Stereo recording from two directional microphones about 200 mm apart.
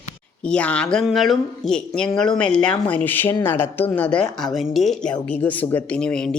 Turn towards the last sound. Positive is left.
turn(degrees=5)  # may be behind; listen again after turning